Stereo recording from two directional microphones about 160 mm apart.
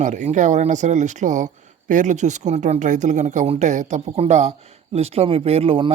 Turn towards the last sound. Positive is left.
turn(degrees=-35)  # may be behind; listen again after turning